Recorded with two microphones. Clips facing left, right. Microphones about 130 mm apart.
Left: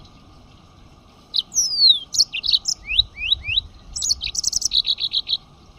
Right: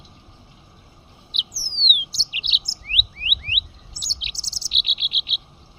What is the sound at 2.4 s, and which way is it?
Chirp, 35° left (ahead or behind).